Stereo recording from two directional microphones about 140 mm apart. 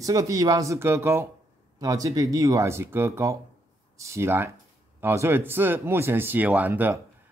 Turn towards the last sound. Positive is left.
turn(degrees=-15)  # may be behind; listen again after turning